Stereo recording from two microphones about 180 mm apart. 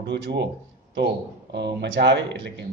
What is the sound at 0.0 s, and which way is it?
Speech, 70° right (ahead or behind).